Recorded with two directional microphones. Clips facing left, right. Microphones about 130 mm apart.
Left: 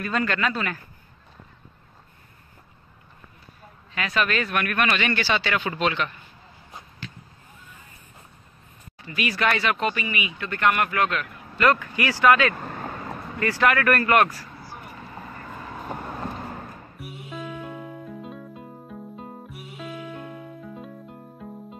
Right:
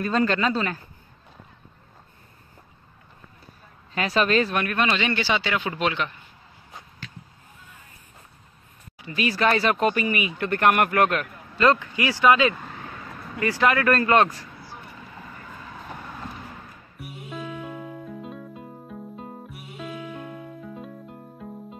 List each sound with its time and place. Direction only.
0.0 s speech: 30° right (ahead or behind)
3.9 s speech: 35° right (ahead or behind); by 6.1 s 15° right (ahead or behind)
9.1 s speech: 35° right (ahead or behind); by 11.2 s 50° right (ahead or behind)
11.5 s speech: 20° right (ahead or behind)
12.5 s vehicle: 50° left (ahead or behind)
13.4 s speech: 20° right (ahead or behind)
15.7 s vehicle: 45° left (ahead or behind)
17.0 s music: centre (ahead or behind)